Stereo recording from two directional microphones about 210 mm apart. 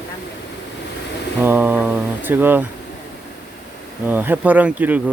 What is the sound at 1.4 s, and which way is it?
Speech, 10° right (ahead or behind).